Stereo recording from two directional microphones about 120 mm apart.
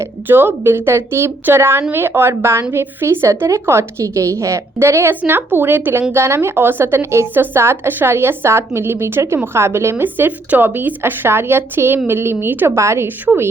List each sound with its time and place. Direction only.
0.0 s a woman's voice: 20° right (ahead or behind)